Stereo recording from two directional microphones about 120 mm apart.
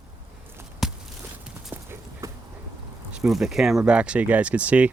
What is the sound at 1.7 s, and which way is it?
Clip-clop, 15° right (ahead or behind).